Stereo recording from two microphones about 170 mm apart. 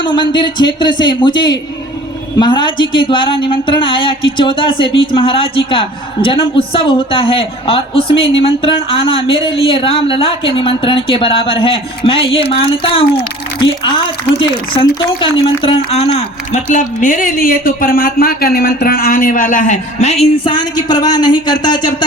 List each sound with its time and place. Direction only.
0.0 s speech: 25° left (ahead or behind)
14.3 s speech: 30° left (ahead or behind)